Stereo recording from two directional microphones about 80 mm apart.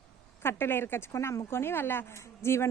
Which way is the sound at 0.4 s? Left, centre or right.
Left.